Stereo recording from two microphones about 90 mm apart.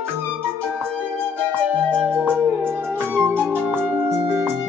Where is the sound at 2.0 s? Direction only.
20° right (ahead or behind).